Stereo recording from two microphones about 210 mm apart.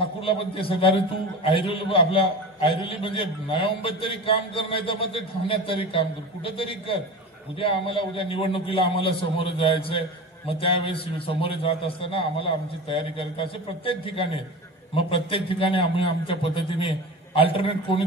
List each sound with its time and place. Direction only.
0.2 s a man's voice: 25° left (ahead or behind)